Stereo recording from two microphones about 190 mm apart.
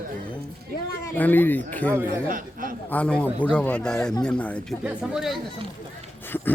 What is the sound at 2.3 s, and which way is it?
Speech, 45° right (ahead or behind).